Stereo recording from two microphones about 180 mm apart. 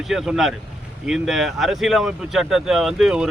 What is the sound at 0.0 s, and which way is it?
Speech, centre (ahead or behind).